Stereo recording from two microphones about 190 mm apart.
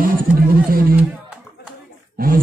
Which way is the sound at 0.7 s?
50° right (ahead or behind).